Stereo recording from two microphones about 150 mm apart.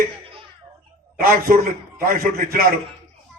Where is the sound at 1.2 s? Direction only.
80° right.